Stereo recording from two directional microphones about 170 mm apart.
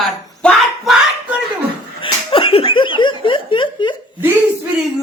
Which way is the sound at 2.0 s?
30° left (ahead or behind).